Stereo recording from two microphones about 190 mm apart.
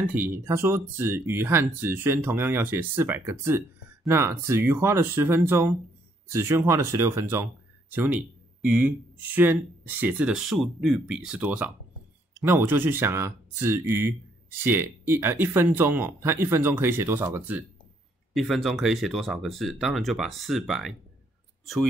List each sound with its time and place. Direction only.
0.0 s speech: 10° right (ahead or behind)
18.3 s speech: centre (ahead or behind)